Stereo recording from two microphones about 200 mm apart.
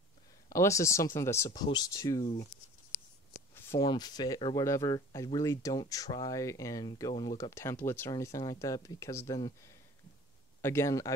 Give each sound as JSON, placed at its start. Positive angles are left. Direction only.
{"t": 0.5, "sound": "speech", "side_deg": 15}
{"t": 3.5, "sound": "a sound", "side_deg": 10}
{"t": 3.8, "sound": "speech", "side_deg": 20}